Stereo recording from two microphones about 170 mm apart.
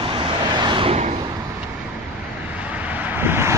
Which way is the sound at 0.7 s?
35° right (ahead or behind).